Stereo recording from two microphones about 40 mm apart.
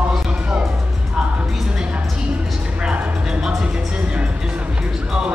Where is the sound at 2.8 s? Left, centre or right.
Right.